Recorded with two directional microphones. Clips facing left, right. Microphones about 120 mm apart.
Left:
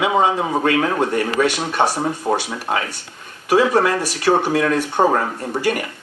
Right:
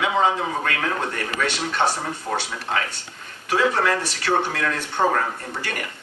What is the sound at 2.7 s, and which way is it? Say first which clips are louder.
Speech: left 3 dB; 45° left (ahead or behind).